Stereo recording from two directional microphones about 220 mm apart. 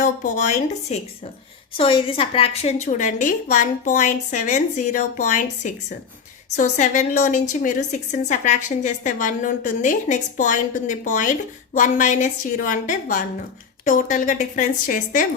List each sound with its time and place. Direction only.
0.0 s a woman's voice: 30° left (ahead or behind)